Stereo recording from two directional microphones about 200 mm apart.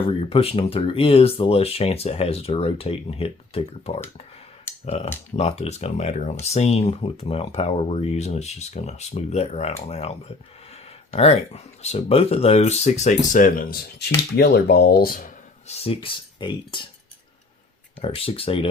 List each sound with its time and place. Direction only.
0.0 s speech: 25° left (ahead or behind); by 15.7 s 45° left (ahead or behind)
15.7 s speech: 30° left (ahead or behind)
18.0 s speech: 30° left (ahead or behind)